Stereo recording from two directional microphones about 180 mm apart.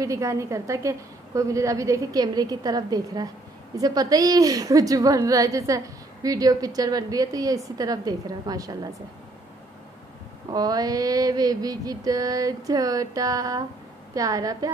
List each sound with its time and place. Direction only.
0.0 s a woman's voice: 15° right (ahead or behind)
3.7 s mantra: 20° right (ahead or behind)
10.5 s mantra: 20° right (ahead or behind)